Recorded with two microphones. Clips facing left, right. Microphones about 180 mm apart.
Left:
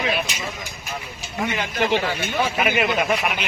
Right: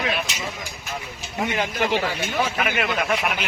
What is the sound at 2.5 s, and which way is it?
Speech, 10° left (ahead or behind).